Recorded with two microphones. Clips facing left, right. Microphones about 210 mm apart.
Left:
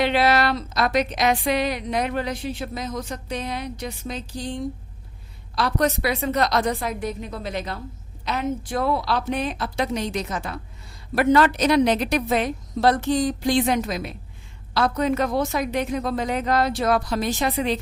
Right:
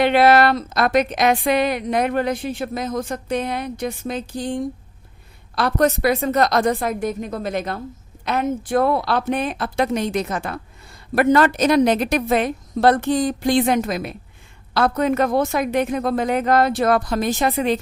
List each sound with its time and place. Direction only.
0.0 s a woman's voice: 55° right (ahead or behind)